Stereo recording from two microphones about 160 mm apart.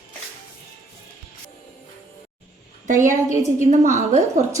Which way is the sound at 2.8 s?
50° right (ahead or behind).